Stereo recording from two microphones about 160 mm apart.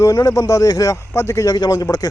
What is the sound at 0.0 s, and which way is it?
Speech, 20° left (ahead or behind).